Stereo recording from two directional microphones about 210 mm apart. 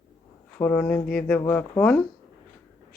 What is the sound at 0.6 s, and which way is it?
Speech, 10° left (ahead or behind).